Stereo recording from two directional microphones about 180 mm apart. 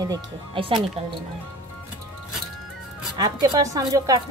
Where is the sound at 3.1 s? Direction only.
20° right (ahead or behind).